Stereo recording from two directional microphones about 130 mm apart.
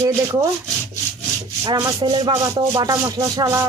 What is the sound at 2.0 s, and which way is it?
Speech, 35° right (ahead or behind).